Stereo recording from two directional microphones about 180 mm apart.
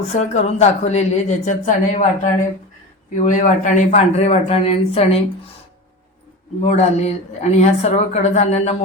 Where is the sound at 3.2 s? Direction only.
45° left (ahead or behind).